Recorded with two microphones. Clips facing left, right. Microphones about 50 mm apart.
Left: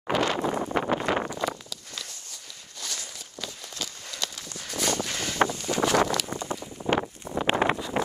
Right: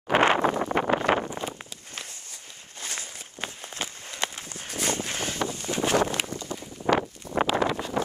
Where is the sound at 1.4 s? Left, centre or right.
Left.